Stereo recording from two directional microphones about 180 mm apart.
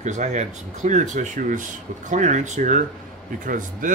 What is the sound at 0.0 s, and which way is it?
Speech, 40° right (ahead or behind).